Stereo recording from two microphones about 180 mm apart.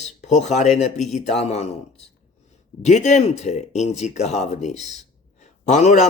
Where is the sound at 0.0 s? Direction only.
40° left (ahead or behind).